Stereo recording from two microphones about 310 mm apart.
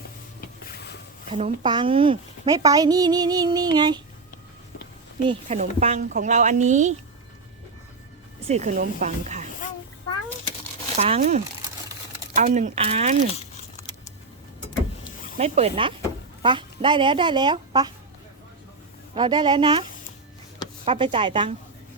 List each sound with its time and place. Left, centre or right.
0.4 s a sound: left
1.3 s a woman's voice: right
5.2 s speech: centre
8.4 s speech: right
10.9 s speech: right
15.4 s a woman's voice: centre
19.1 s a woman's voice: centre
20.8 s a woman's voice: centre